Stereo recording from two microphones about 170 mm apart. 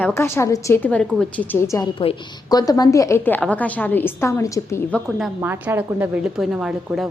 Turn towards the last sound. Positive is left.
turn(degrees=-5)  # may be behind; listen again after turning